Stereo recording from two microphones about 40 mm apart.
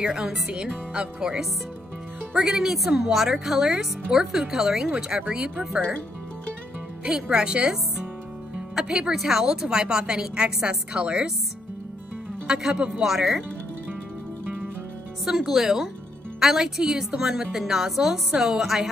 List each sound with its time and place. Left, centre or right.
0.0 s speech: centre
2.4 s a woman's voice: centre
4.8 s speech: right
7.1 s speech: right
9.1 s a woman's voice: centre
12.4 s speech: centre
13.0 s a woman's voice: centre
15.2 s a woman's voice: centre